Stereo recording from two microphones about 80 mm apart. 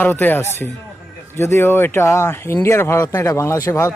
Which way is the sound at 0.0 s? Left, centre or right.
Left.